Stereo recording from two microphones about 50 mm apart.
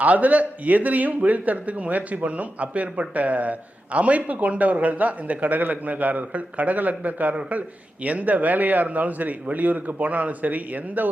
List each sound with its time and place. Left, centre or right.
0.0 s a man's voice: right